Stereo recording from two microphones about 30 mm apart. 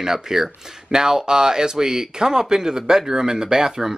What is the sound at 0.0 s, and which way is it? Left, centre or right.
Speech, centre.